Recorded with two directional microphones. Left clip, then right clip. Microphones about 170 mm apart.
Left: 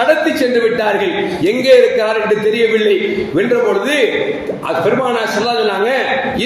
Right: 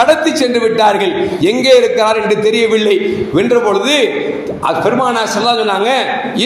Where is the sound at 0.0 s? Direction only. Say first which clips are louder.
Right 2 dB; 35° right (ahead or behind).